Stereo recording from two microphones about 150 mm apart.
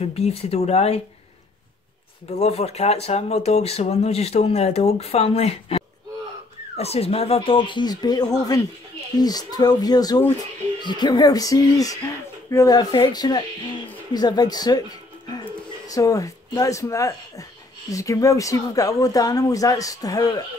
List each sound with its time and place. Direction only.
0.0 s speech: 45° left (ahead or behind)
2.2 s speech: 45° left (ahead or behind); by 14.8 s 25° left (ahead or behind)
15.9 s speech: 20° left (ahead or behind)